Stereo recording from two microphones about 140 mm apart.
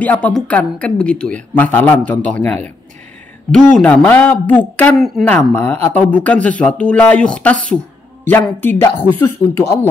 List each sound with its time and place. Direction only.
0.0 s speech: 10° left (ahead or behind)
4.9 s speech: centre (ahead or behind)
5.5 s speech: 10° left (ahead or behind)